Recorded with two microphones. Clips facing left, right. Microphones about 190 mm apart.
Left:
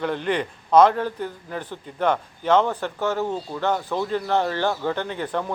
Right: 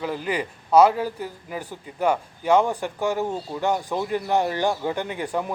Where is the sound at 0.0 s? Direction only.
5° right (ahead or behind).